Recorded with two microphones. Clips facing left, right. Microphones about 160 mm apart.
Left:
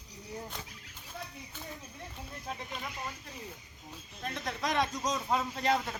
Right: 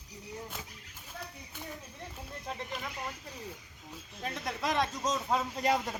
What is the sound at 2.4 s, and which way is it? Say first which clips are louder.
Speech: right 1 dB; centre (ahead or behind).